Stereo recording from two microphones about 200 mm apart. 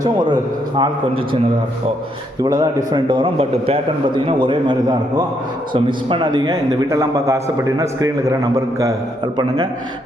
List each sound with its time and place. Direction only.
0.8 s a man's voice: 25° right (ahead or behind)
2.4 s a man's voice: 20° right (ahead or behind)